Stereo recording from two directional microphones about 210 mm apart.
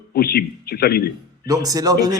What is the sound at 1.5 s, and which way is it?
Speech, 15° right (ahead or behind).